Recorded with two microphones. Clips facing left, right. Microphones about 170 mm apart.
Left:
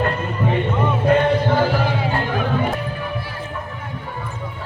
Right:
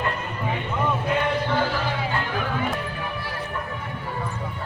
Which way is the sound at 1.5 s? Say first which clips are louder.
Left 6 dB; 45° left (ahead or behind).